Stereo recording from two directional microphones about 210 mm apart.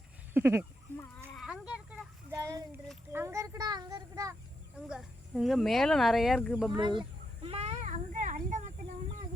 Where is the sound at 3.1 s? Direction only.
15° right (ahead or behind).